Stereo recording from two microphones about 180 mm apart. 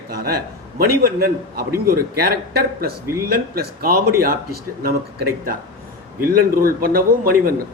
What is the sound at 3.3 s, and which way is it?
A man's voice, 55° right (ahead or behind).